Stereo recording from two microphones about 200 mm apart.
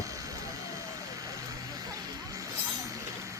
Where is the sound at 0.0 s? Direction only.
15° right (ahead or behind).